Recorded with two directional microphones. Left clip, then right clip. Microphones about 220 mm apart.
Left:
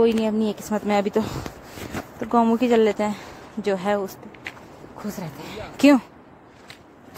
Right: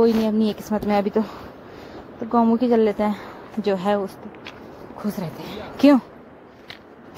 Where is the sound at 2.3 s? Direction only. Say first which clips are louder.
Even; 10° left (ahead or behind).